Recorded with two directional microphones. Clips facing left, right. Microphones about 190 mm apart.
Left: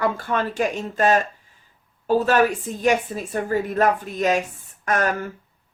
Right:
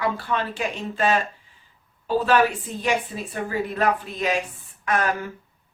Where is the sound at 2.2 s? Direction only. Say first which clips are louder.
Left 1 dB; 45° left (ahead or behind).